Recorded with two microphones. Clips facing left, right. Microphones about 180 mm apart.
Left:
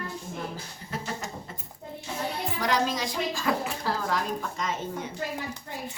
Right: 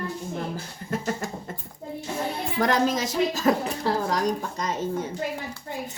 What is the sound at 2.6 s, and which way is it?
A woman's voice, 50° right (ahead or behind).